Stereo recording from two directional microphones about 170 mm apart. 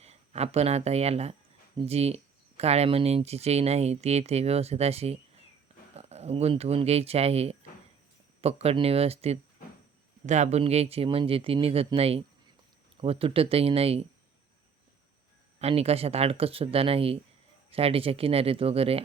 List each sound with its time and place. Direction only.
0.0 s speech: 40° right (ahead or behind)
15.5 s speech: 35° right (ahead or behind)